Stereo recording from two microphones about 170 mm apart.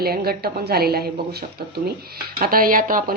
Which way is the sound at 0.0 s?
65° right (ahead or behind).